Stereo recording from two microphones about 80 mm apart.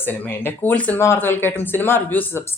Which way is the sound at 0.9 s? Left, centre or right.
Left.